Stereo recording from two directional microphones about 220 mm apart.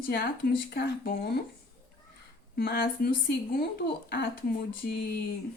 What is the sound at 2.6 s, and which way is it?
Speech, 45° left (ahead or behind).